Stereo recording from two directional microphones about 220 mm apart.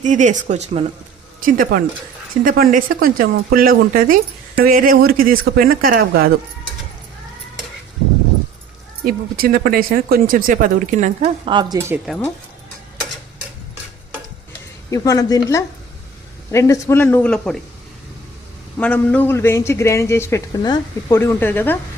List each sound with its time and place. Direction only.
0.0 s speech: 35° right (ahead or behind)
9.0 s speech: 45° right (ahead or behind); by 11.9 s 15° right (ahead or behind)
12.0 s speech: 5° left (ahead or behind)
14.8 s a man's voice: 15° left (ahead or behind)
18.8 s a man's voice: 5° left (ahead or behind)